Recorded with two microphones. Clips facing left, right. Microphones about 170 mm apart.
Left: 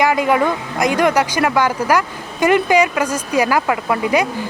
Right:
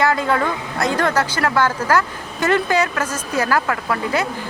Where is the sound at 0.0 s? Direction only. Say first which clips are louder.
Left 3 dB; 15° left (ahead or behind).